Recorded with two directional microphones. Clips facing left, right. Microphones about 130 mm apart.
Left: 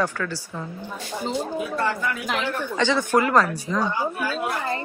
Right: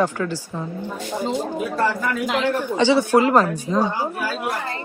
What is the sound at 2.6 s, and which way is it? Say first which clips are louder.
A woman's voice: right 5 dB; 15° right (ahead or behind).